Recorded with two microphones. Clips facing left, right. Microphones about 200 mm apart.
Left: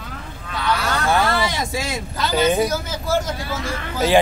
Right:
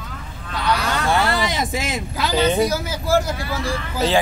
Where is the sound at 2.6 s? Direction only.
10° right (ahead or behind).